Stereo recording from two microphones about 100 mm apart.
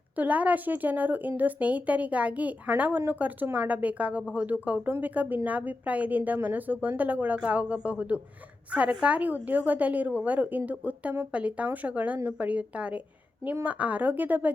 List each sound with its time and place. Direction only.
0.2 s speech: 15° right (ahead or behind)